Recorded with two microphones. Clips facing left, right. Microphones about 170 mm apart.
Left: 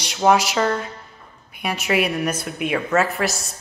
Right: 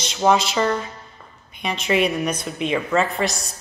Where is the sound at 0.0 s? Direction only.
10° left (ahead or behind).